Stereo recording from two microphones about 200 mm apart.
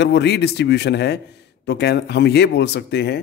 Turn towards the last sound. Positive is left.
turn(degrees=60)  # may be behind; listen again after turning